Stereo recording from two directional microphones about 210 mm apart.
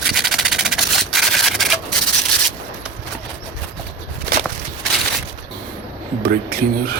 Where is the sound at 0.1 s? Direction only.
Centre (ahead or behind).